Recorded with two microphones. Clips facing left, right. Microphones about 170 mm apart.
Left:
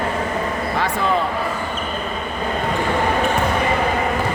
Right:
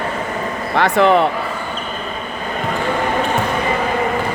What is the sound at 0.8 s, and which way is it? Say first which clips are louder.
Speech: right 9 dB; 75° right (ahead or behind).